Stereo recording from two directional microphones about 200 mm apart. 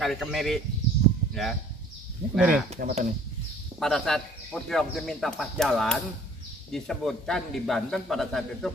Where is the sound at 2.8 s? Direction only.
45° right (ahead or behind).